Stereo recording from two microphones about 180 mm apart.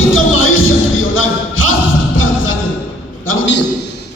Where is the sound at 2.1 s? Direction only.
90° left.